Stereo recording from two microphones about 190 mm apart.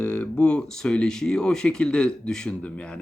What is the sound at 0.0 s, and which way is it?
Speech, 5° left (ahead or behind).